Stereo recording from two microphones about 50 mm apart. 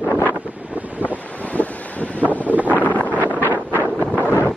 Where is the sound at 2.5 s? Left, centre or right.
Right.